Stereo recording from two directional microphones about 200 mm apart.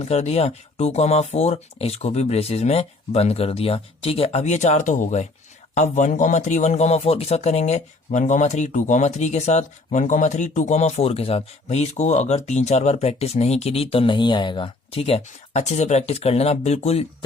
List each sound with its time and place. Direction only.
0.0 s speech: 35° left (ahead or behind)